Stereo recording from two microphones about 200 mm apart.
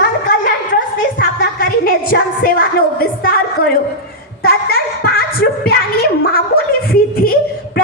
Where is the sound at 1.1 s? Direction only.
50° left (ahead or behind).